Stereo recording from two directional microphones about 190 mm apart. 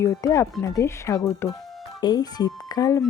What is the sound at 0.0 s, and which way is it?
A woman's voice, 15° left (ahead or behind).